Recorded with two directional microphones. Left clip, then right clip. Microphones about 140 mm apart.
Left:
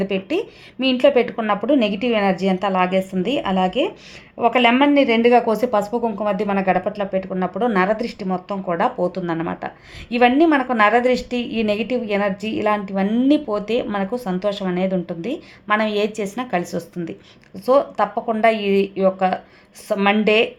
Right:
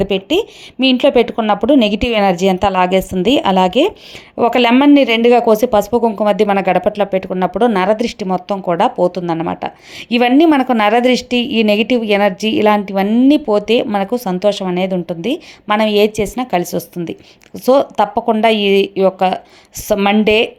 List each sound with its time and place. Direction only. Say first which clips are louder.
0.0 s speech: right 7 dB; 30° right (ahead or behind)
4.4 s speech: right 4 dB; 50° right (ahead or behind)
4.7 s speech: right 5 dB; 35° right (ahead or behind)
12.9 s speech: right 6 dB; 30° right (ahead or behind)
17.7 s speech: right 5 dB; 45° right (ahead or behind)